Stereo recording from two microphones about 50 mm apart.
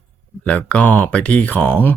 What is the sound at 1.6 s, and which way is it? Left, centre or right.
Speech, left.